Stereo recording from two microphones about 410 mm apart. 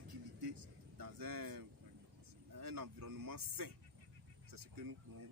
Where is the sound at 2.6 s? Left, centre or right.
Right.